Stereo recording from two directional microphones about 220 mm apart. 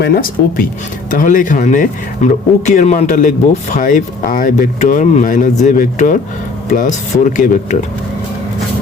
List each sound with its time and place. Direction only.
0.0 s speech: 45° left (ahead or behind)